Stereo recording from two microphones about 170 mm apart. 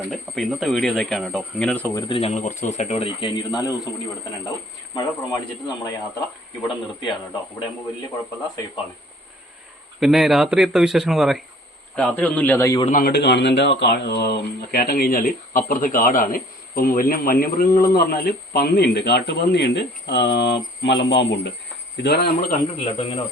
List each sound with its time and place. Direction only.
0.1 s speech: centre (ahead or behind)
2.0 s speech: 30° left (ahead or behind)
4.9 s speech: 25° left (ahead or behind)
10.0 s speech: centre (ahead or behind); by 12.8 s 15° left (ahead or behind)
12.8 s a man's voice: 50° left (ahead or behind)
13.1 s speech: 90° left
21.9 s speech: 75° left (ahead or behind); by 22.5 s 60° left (ahead or behind)
22.8 s speech: 35° left (ahead or behind)